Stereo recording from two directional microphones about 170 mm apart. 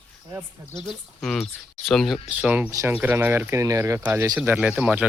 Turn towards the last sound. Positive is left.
turn(degrees=-10)  # may be behind; listen again after turning